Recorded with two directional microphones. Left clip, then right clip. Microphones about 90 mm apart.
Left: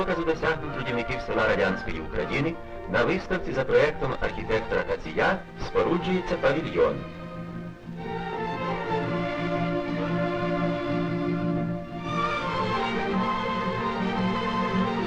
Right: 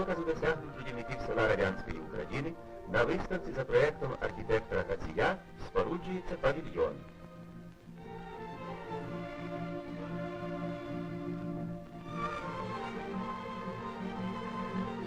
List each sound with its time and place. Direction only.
0.0 s speech: 40° right (ahead or behind)
8.1 s music: 35° right (ahead or behind)